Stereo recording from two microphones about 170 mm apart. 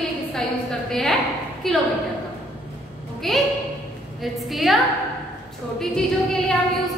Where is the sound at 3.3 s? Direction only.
Centre (ahead or behind).